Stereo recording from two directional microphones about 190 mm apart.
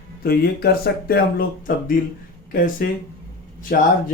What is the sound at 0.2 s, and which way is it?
A man's voice, 55° left (ahead or behind).